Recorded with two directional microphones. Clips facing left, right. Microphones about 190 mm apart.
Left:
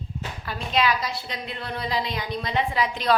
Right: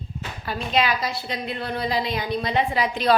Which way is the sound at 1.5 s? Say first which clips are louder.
Right 4 dB; 40° right (ahead or behind).